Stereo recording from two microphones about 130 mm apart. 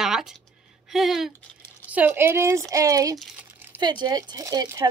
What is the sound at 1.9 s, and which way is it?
A woman's voice, 15° right (ahead or behind).